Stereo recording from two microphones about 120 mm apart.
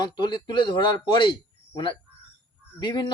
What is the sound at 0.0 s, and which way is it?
Speech, 40° left (ahead or behind).